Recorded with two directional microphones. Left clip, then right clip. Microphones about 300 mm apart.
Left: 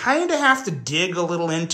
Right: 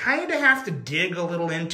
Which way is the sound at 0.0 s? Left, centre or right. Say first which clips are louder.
Left 2 dB; centre.